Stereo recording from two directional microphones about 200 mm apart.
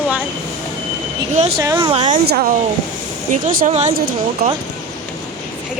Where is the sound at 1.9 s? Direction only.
35° right (ahead or behind).